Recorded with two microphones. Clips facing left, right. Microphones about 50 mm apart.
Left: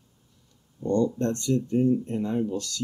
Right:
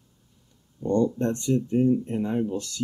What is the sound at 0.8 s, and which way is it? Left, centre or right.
Speech, centre.